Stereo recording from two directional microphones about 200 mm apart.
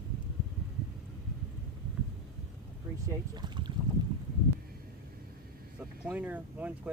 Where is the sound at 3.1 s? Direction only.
20° right (ahead or behind).